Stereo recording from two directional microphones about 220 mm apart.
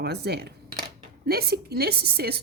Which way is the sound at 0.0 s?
45° right (ahead or behind).